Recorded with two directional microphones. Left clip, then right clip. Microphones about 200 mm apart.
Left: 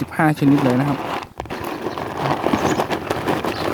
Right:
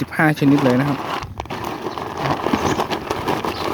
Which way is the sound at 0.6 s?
10° right (ahead or behind).